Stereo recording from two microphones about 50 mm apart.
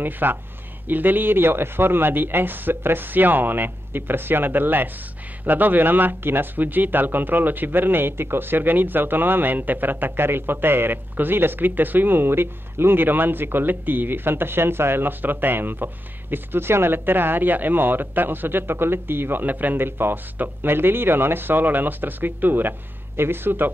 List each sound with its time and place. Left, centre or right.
0.0 s speech: right